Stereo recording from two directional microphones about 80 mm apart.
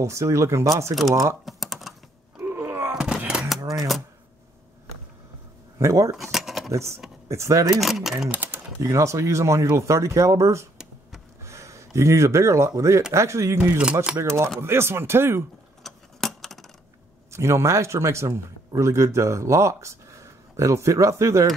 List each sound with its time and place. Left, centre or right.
0.0 s speech: right
1.4 s typing: centre
2.4 s a sound: right
2.9 s a sound: centre
5.8 s speech: right
6.1 s a sound: centre
6.7 s speech: right
7.8 s speech: centre
8.3 s speech: right
8.8 s speech: right
15.8 s a sound: centre
17.3 s speech: right